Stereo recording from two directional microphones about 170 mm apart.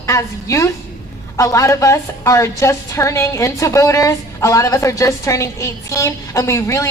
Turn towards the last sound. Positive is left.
turn(degrees=15)  # may be behind; listen again after turning